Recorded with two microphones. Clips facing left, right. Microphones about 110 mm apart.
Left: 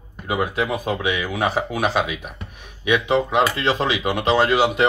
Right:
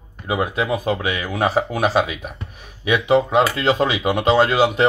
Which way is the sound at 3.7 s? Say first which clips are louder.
Right 2 dB; 40° right (ahead or behind).